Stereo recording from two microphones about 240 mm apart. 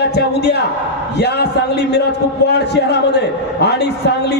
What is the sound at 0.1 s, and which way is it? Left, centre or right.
A man's voice, left.